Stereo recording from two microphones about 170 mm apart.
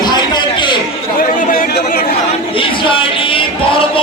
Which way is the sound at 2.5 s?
30° left (ahead or behind).